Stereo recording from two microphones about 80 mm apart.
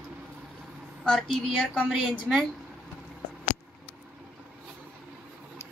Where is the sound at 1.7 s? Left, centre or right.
Centre.